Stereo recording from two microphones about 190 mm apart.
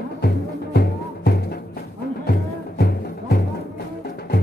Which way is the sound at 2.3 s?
55° left (ahead or behind).